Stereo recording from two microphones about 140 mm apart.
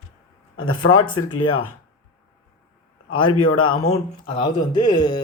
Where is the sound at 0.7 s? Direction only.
35° left (ahead or behind).